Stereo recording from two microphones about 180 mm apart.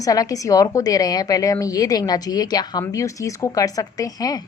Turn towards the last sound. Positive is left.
turn(degrees=20)  # may be behind; listen again after turning